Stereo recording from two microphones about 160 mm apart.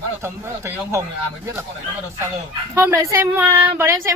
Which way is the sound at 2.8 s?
20° right (ahead or behind).